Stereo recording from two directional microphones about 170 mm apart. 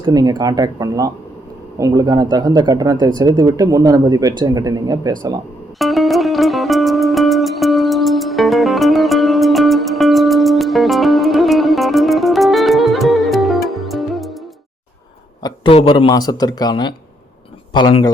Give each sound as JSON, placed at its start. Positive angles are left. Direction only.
{"t": 0.0, "sound": "speech", "side_deg": -25}
{"t": 5.8, "sound": "music", "side_deg": 0}
{"t": 15.4, "sound": "speech", "side_deg": 30}